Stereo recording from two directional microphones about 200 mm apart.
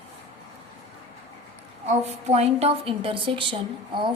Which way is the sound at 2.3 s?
30° right (ahead or behind).